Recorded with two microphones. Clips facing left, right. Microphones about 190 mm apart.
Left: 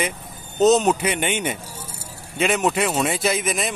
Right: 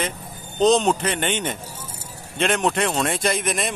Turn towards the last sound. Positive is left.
turn(degrees=0)  # may be behind; listen again after turning